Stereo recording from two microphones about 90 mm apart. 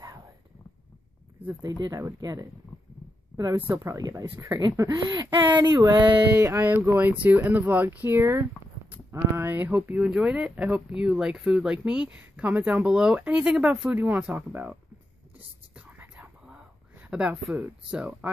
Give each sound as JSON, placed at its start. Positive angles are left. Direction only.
{"t": 1.8, "sound": "speech", "side_deg": -40}
{"t": 3.5, "sound": "speech", "side_deg": -25}
{"t": 4.1, "sound": "speech", "side_deg": -35}
{"t": 4.7, "sound": "speech", "side_deg": -50}
{"t": 6.3, "sound": "speech", "side_deg": -30}
{"t": 15.3, "sound": "whispering", "side_deg": -15}
{"t": 17.0, "sound": "speech", "side_deg": -15}